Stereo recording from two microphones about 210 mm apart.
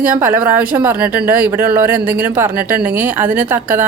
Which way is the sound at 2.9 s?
10° right (ahead or behind).